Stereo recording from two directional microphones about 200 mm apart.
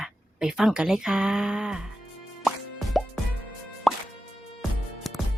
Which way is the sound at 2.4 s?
Centre (ahead or behind).